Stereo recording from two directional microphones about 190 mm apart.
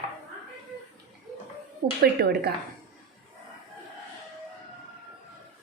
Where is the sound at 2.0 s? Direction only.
55° right (ahead or behind).